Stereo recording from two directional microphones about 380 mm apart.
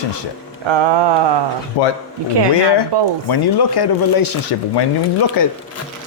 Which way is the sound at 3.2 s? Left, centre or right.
Left.